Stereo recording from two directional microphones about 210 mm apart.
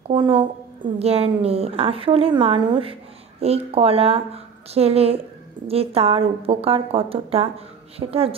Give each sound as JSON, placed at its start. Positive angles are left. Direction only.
{"t": 0.1, "sound": "a woman's voice", "side_deg": -25}